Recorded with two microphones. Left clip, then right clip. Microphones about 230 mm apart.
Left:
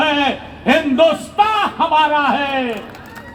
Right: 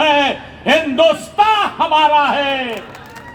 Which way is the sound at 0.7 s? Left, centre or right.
Right.